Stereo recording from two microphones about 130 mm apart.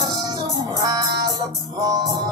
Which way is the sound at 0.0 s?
35° right (ahead or behind).